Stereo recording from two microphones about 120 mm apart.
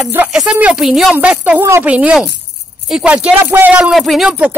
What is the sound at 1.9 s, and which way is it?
Speech, 10° right (ahead or behind).